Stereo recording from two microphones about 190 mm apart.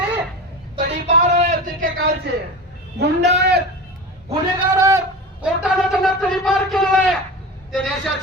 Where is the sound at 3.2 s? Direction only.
60° right (ahead or behind).